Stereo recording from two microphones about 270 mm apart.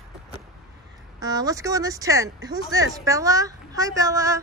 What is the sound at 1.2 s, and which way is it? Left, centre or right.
A woman's voice, centre.